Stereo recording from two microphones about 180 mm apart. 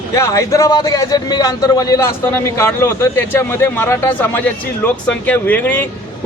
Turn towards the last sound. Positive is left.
turn(degrees=10)  # may be behind; listen again after turning